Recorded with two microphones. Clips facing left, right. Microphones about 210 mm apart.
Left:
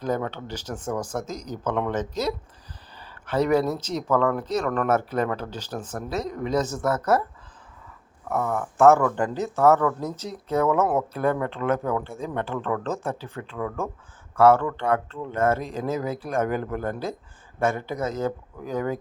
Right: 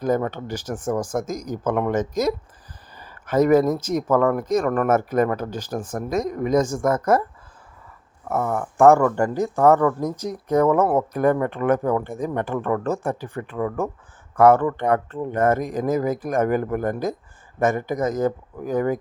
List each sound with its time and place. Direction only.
0.0 s speech: 10° right (ahead or behind)
3.0 s a sound: 10° right (ahead or behind)
3.6 s speech: 10° right (ahead or behind)
8.4 s speech: 15° right (ahead or behind)